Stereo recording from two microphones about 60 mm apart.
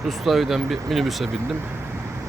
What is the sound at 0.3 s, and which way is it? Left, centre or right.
Speech, centre.